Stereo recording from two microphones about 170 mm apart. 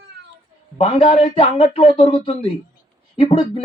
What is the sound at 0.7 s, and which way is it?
Speech, 35° left (ahead or behind).